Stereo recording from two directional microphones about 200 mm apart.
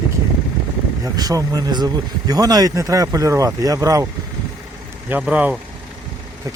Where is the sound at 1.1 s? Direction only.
20° right (ahead or behind).